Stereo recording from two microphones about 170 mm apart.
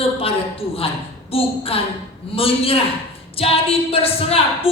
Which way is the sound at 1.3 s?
35° left (ahead or behind).